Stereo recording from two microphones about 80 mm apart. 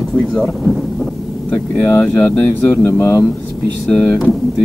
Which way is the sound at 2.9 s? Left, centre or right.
Left.